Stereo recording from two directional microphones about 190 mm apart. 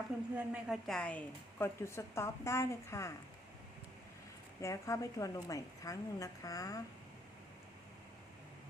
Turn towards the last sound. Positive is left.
turn(degrees=20)  # may be behind; listen again after turning